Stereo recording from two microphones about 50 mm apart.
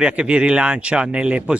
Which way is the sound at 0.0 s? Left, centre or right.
Centre.